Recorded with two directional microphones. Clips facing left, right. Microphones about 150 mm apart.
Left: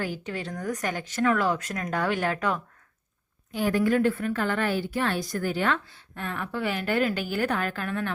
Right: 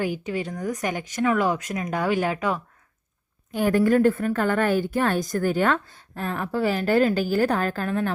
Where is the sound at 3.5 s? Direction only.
50° right (ahead or behind).